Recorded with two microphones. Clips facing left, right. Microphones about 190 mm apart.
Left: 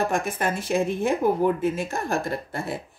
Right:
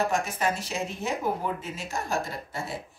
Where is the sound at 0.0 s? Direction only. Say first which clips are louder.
Left 2 dB; 55° left (ahead or behind).